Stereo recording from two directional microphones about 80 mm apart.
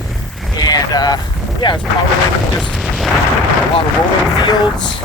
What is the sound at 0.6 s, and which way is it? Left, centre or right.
Speech, left.